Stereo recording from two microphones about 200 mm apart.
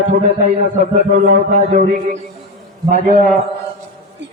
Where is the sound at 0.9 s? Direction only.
40° right (ahead or behind).